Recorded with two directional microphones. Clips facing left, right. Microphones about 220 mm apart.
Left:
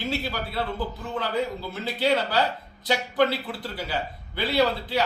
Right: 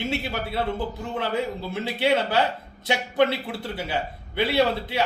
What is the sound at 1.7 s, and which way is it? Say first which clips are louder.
A man's voice: right 2 dB; 25° right (ahead or behind).